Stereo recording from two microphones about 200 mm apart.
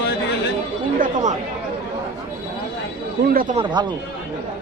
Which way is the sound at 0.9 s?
40° right (ahead or behind).